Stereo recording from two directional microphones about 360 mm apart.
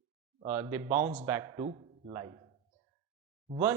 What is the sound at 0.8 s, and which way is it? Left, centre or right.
Speech, right.